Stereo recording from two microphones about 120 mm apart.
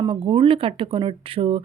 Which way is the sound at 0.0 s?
45° right (ahead or behind).